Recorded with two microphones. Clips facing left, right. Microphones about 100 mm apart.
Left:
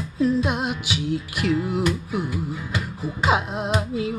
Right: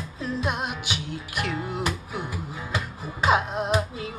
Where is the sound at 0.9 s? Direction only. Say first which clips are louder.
Left 7 dB; 45° right (ahead or behind).